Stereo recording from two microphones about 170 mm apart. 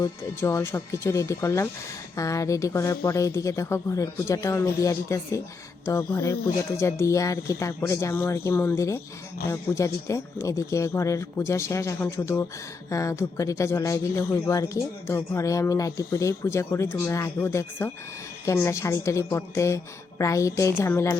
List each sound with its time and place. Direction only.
0.0 s speech: 15° left (ahead or behind)